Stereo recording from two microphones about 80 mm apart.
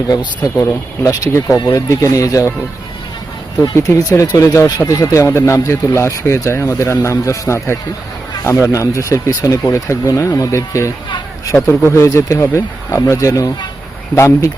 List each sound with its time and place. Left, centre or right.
0.6 s speech: left
3.8 s speech: left
11.5 s speech: centre
11.9 s speech: left